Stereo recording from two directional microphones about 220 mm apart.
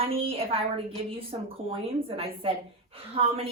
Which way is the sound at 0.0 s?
25° right (ahead or behind).